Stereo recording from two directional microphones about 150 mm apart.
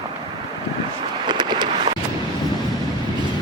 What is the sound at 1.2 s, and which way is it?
Vehicle, 30° right (ahead or behind).